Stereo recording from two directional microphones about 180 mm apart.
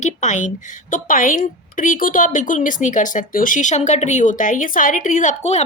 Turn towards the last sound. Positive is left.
turn(degrees=40)  # may be behind; listen again after turning